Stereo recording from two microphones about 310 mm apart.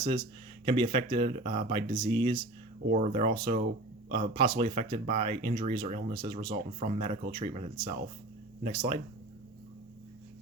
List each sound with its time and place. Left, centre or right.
0.0 s speech: centre